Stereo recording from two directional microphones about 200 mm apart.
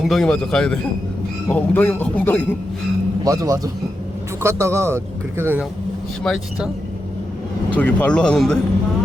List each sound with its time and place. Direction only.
0.0 s a man's voice: centre (ahead or behind)
3.2 s speech: 15° right (ahead or behind)
6.2 s a man's voice: centre (ahead or behind)
7.8 s a man's voice: 5° left (ahead or behind)